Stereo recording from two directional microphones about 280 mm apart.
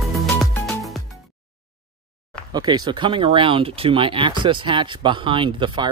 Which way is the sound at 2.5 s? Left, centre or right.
Centre.